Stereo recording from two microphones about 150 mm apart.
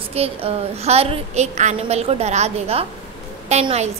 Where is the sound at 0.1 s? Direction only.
40° right (ahead or behind).